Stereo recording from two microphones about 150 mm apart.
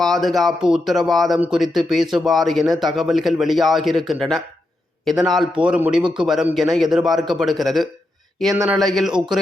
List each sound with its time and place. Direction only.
0.0 s a man's voice: centre (ahead or behind)
6.0 s a man's voice: 30° right (ahead or behind)
6.2 s a man's voice: centre (ahead or behind)